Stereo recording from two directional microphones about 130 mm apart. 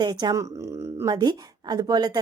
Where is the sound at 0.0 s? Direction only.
35° right (ahead or behind).